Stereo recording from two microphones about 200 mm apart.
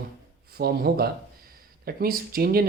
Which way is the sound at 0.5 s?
50° right (ahead or behind).